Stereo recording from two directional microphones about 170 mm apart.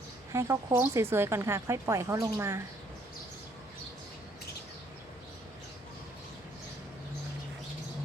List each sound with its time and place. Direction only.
0.3 s speech: 15° right (ahead or behind)